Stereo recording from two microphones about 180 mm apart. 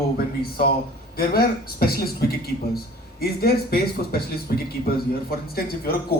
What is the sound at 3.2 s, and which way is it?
A man's voice, 60° left (ahead or behind).